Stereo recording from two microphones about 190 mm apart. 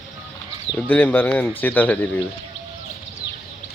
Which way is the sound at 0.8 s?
10° left (ahead or behind).